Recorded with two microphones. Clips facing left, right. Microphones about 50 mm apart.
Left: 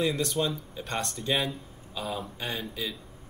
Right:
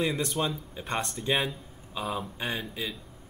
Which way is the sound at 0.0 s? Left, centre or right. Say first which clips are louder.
Left 1 dB; centre.